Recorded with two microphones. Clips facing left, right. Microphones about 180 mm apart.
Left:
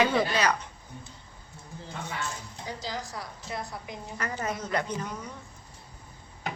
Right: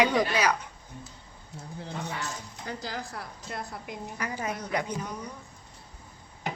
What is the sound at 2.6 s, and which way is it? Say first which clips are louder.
A woman's voice: even; 55° right (ahead or behind).